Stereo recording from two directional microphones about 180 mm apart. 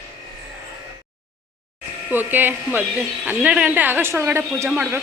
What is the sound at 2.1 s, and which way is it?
A woman's voice, 10° right (ahead or behind).